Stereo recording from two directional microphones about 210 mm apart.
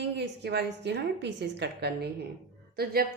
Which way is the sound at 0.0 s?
55° right (ahead or behind).